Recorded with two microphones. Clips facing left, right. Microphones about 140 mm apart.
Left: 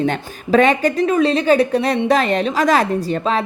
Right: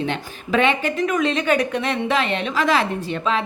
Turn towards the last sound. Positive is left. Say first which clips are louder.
# left 4 dB
turn(degrees=40)  # may be behind; listen again after turning